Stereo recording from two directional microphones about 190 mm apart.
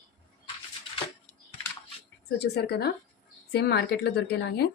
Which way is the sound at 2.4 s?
60° left (ahead or behind).